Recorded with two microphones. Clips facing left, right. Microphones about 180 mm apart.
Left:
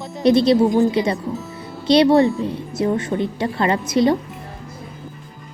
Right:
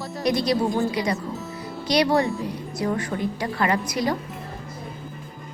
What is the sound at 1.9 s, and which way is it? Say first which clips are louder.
A woman's voice: left 7 dB; 25° left (ahead or behind).